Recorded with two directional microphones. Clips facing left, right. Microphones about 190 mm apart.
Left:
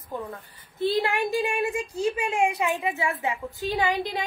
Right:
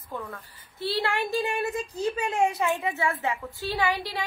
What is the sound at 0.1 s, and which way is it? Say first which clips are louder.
A woman's voice: left 2 dB; 20° left (ahead or behind).